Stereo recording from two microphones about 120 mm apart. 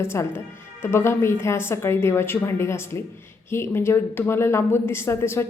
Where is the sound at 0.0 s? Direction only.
20° left (ahead or behind).